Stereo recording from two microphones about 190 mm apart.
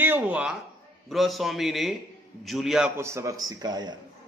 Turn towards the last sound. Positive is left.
turn(degrees=-20)  # may be behind; listen again after turning